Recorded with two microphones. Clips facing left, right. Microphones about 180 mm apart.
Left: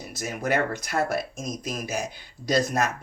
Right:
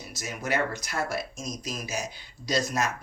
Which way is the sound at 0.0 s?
55° left (ahead or behind).